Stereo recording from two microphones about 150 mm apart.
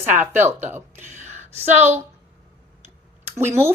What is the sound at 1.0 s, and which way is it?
Speech, 50° right (ahead or behind).